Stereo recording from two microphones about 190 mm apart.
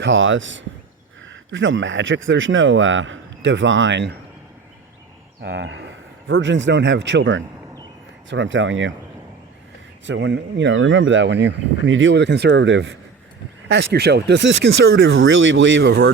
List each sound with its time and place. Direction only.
0.0 s speech: 85° right; by 4.2 s 65° right (ahead or behind)
5.4 s speech: 65° right (ahead or behind); by 8.9 s 80° right
10.1 s speech: 70° right (ahead or behind)
13.9 s speech: 60° right (ahead or behind)